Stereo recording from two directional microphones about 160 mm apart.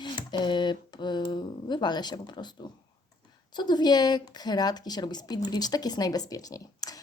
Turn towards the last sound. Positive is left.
turn(degrees=25)  # may be behind; listen again after turning